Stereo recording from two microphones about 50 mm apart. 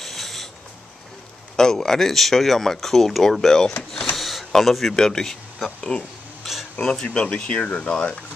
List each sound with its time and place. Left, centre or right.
0.0 s rub: centre
1.6 s speech: centre
3.9 s a sound: centre
4.5 s speech: centre; by 8.2 s left